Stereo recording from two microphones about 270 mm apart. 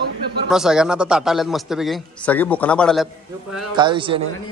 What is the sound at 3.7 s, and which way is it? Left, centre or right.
Speech, centre.